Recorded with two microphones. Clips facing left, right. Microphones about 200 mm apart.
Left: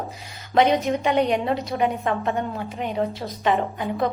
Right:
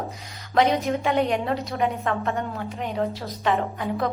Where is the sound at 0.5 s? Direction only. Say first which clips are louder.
Left 2 dB; centre (ahead or behind).